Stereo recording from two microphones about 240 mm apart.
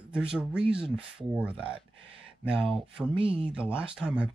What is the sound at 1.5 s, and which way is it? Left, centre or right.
Speech, right.